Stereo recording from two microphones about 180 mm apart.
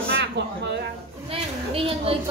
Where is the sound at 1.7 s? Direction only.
30° right (ahead or behind).